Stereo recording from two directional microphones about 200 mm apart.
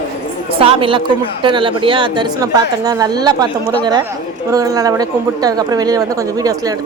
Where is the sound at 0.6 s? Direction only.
25° right (ahead or behind).